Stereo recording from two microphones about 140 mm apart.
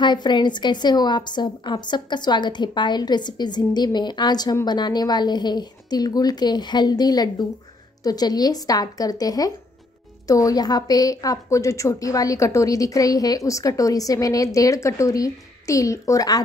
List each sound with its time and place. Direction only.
0.0 s a woman's voice: 30° left (ahead or behind)